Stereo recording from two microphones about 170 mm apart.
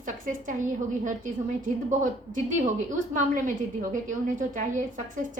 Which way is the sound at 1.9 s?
45° right (ahead or behind).